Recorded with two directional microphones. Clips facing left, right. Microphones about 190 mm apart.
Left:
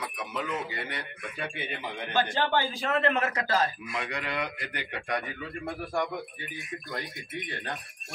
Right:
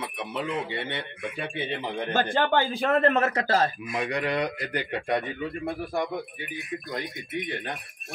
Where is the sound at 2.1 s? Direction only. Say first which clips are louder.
Right 3 dB; 50° right (ahead or behind); by 7.7 s 20° right (ahead or behind).